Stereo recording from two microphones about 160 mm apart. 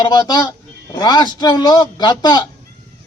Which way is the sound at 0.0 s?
25° left (ahead or behind).